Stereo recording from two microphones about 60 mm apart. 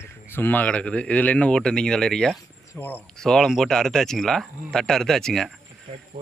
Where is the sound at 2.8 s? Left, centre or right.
Left.